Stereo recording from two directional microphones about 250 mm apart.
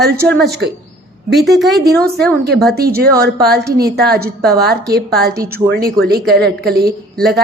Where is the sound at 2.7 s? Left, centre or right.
Right.